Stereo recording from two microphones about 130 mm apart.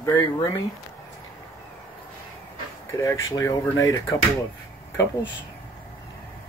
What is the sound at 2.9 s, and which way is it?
Speech, 25° left (ahead or behind).